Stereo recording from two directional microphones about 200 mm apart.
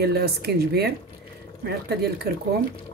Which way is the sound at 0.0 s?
55° right (ahead or behind).